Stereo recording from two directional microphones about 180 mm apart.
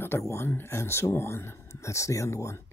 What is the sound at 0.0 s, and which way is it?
Speech, 15° left (ahead or behind).